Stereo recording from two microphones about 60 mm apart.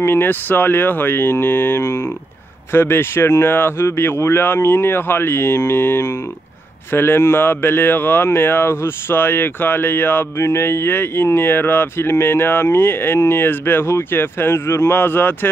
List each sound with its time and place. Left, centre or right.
0.0 s speech: left
10.3 s speech: left